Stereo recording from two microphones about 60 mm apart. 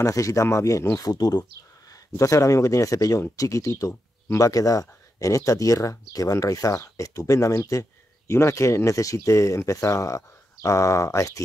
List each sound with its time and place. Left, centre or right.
0.0 s speech: left
1.9 s speech: left
8.3 s speech: left